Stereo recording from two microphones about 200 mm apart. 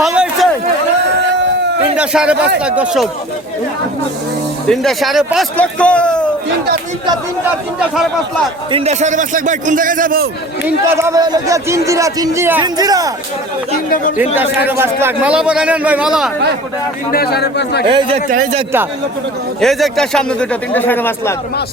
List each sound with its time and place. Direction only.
0.0 s a sound: 5° right (ahead or behind)
2.0 s a man's voice: 5° right (ahead or behind)
4.7 s a man's voice: centre (ahead or behind)
8.7 s a man's voice: 35° right (ahead or behind)
10.9 s a man's voice: 15° right (ahead or behind)
14.3 s speech: 10° right (ahead or behind)
17.1 s a man's voice: 50° left (ahead or behind)
17.8 s a man's voice: 25° right (ahead or behind)
18.3 s speech: 40° right (ahead or behind)
19.6 s a man's voice: centre (ahead or behind)